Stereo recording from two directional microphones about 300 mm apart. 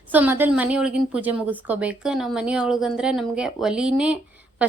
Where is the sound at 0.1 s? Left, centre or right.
Centre.